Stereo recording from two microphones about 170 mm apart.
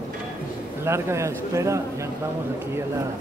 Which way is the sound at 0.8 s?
15° right (ahead or behind).